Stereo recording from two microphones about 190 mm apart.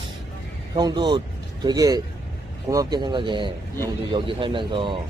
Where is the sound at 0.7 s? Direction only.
20° right (ahead or behind).